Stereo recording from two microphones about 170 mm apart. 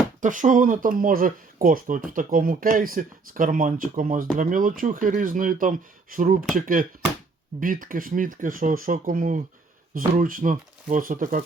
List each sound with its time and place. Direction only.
0.2 s speech: 50° right (ahead or behind)